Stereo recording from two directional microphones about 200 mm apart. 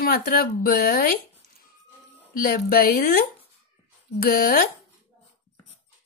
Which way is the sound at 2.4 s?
45° left (ahead or behind).